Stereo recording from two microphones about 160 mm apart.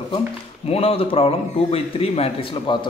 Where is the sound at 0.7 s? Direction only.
35° left (ahead or behind).